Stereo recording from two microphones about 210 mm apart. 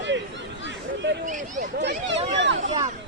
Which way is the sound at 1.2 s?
35° right (ahead or behind).